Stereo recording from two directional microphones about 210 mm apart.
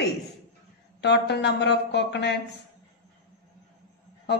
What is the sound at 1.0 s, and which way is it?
A man's voice, 55° left (ahead or behind).